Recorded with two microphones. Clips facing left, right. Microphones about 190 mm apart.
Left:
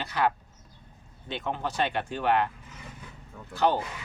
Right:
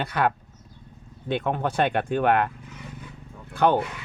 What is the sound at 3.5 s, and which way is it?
Speech, 55° right (ahead or behind).